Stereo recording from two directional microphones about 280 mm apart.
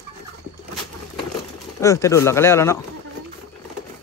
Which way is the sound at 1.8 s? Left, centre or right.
Centre.